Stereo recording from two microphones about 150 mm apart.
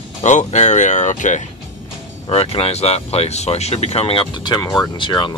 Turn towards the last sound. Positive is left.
turn(degrees=30)  # may be behind; listen again after turning